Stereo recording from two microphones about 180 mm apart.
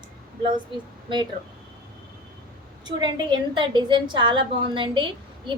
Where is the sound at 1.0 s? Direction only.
25° right (ahead or behind).